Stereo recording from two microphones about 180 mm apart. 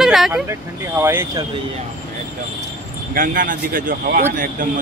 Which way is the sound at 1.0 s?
15° right (ahead or behind).